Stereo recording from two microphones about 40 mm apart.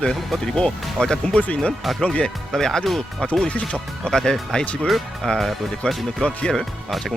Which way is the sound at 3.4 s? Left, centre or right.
Left.